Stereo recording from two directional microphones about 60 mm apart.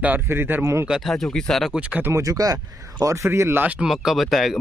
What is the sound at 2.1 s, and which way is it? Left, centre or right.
Speech, right.